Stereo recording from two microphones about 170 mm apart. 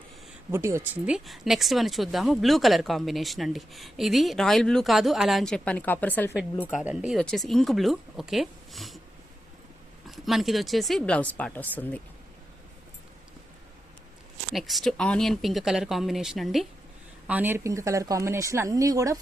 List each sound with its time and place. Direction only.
0.5 s speech: 15° right (ahead or behind); by 6.3 s 10° left (ahead or behind)
6.8 s speech: 5° right (ahead or behind)
10.1 s speech: centre (ahead or behind)
14.5 s speech: centre (ahead or behind); by 19.2 s 20° right (ahead or behind)